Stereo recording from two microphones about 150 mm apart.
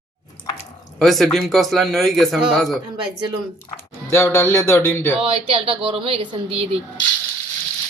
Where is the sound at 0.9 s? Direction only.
Centre (ahead or behind).